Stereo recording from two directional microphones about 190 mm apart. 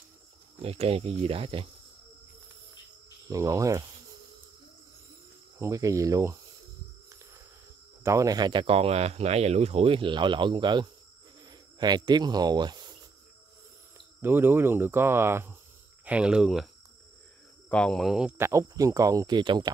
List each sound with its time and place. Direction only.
0.6 s speech: 30° right (ahead or behind)
3.3 s cricket: 15° right (ahead or behind)
5.6 s cricket: 15° right (ahead or behind)
8.0 s speech: 15° right (ahead or behind)
14.2 s cricket: 10° right (ahead or behind)
16.1 s speech: 5° right (ahead or behind)
17.6 s speech: 5° left (ahead or behind)
18.5 s cricket: 15° right (ahead or behind)